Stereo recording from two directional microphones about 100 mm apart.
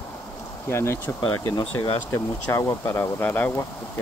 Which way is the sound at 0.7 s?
25° left (ahead or behind).